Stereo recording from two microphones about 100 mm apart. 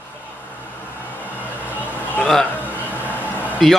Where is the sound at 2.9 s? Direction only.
20° left (ahead or behind).